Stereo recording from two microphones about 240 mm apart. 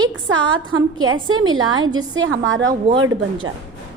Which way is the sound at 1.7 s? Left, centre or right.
Centre.